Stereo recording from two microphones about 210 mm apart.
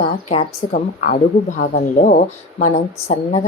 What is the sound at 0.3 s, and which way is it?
A woman's voice, 30° left (ahead or behind).